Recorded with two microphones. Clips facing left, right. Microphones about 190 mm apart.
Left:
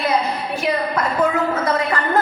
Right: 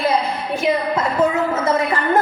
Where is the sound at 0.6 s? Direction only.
25° right (ahead or behind).